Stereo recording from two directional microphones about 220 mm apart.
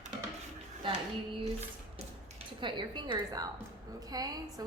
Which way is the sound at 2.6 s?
20° right (ahead or behind).